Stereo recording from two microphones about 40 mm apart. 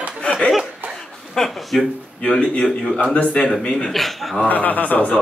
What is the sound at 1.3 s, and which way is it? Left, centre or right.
Speech, centre.